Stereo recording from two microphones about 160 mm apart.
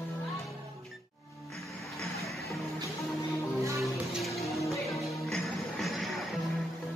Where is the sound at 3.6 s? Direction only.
20° right (ahead or behind).